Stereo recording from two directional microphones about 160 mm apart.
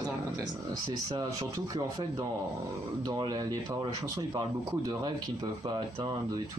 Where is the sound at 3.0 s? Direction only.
25° right (ahead or behind).